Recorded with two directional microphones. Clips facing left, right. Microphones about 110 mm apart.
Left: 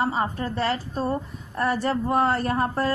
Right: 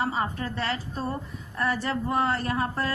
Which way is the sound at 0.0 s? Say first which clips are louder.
Left 3 dB; 35° left (ahead or behind).